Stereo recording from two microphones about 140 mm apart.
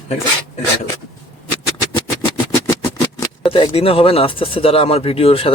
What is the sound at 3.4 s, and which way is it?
Speech, 40° left (ahead or behind).